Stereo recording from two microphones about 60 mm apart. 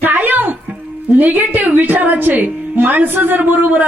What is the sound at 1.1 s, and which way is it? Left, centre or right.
A woman's voice, right.